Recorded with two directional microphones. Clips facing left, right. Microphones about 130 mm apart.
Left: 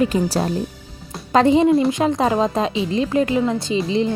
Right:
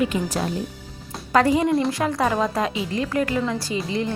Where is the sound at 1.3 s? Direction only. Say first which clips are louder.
Left 4 dB; 20° left (ahead or behind).